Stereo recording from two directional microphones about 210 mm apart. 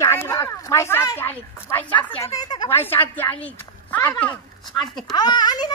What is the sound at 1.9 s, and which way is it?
A woman's voice, 25° left (ahead or behind).